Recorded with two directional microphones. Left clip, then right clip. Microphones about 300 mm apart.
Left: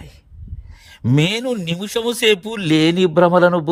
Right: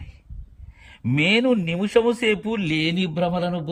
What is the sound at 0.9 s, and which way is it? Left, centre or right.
A man's voice, left.